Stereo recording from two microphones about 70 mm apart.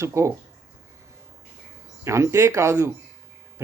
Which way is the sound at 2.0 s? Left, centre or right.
Right.